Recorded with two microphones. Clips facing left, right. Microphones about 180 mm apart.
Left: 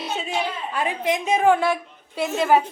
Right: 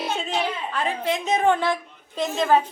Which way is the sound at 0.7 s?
15° left (ahead or behind).